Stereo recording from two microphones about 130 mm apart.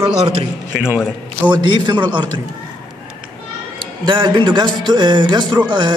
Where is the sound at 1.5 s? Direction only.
35° right (ahead or behind).